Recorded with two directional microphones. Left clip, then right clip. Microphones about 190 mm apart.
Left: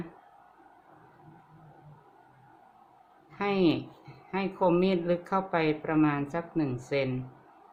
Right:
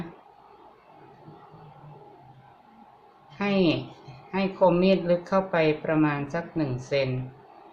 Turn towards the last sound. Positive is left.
turn(degrees=40)  # may be behind; listen again after turning